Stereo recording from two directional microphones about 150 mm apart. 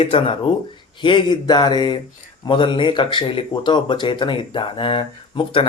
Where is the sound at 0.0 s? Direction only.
40° left (ahead or behind).